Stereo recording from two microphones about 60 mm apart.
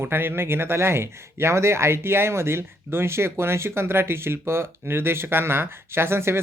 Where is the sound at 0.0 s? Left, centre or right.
Right.